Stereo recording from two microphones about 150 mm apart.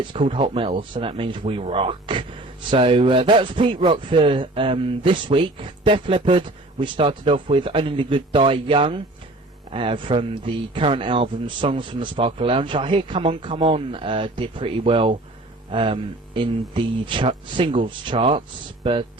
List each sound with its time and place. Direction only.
0.0 s speech: 35° right (ahead or behind)